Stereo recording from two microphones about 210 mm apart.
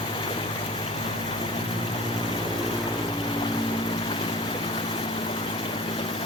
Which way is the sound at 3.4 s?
25° left (ahead or behind).